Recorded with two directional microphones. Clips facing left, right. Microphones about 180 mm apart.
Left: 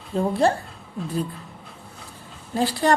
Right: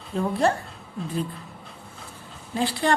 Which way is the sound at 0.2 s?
30° left (ahead or behind).